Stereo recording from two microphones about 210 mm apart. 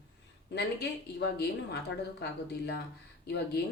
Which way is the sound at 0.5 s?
55° left (ahead or behind).